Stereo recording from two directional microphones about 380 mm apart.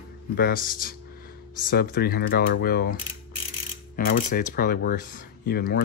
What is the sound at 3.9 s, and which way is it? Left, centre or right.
Speech, left.